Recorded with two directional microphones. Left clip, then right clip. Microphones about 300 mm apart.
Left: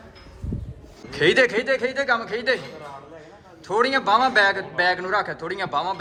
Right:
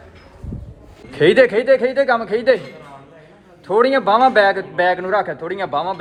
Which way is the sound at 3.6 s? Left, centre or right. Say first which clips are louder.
Right 6 dB; centre.